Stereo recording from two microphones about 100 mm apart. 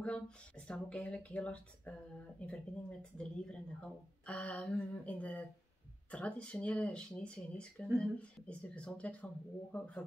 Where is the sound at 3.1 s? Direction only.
10° left (ahead or behind).